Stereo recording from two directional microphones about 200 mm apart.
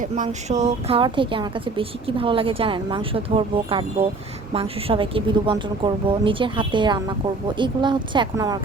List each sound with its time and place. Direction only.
0.0 s a woman's voice: 35° right (ahead or behind); by 8.5 s 20° right (ahead or behind)